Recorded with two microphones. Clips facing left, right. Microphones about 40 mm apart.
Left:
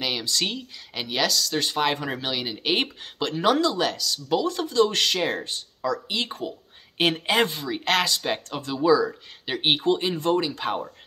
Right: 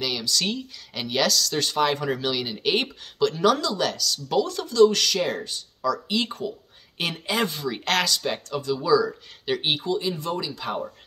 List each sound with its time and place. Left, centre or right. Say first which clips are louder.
0.0 s speech: even; left
0.5 s speech: right 3 dB; centre
4.5 s speech: right 6 dB; left
6.0 s speech: right 3 dB; centre
7.0 s speech: left 4 dB; left
7.5 s speech: left 1 dB; centre
8.5 s speech: right 5 dB; left
8.7 s speech: left 2 dB; left